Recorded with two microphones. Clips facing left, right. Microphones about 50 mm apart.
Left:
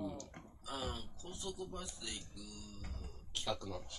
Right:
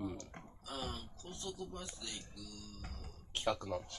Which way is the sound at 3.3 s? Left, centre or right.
Right.